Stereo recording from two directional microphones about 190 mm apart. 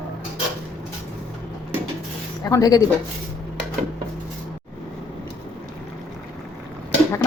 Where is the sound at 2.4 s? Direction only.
20° left (ahead or behind).